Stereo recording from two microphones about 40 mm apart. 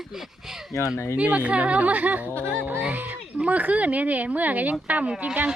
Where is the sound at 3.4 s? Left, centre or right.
Right.